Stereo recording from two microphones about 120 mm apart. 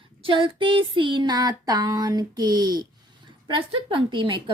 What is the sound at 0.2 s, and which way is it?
Speech, 45° right (ahead or behind).